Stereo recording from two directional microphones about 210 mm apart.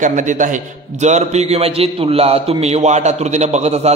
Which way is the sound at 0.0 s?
35° right (ahead or behind).